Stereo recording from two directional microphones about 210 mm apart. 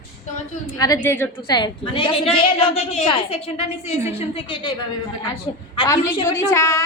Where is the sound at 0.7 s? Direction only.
15° left (ahead or behind).